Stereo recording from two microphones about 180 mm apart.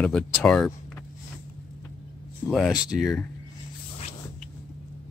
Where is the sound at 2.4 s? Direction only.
Centre (ahead or behind).